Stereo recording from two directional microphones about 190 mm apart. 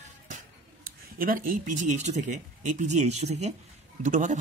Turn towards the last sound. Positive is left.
turn(degrees=-40)  # may be behind; listen again after turning